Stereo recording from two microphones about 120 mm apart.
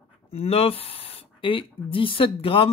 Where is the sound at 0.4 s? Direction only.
55° left (ahead or behind).